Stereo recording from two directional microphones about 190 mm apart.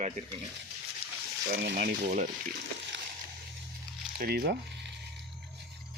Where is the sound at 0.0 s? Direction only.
35° right (ahead or behind).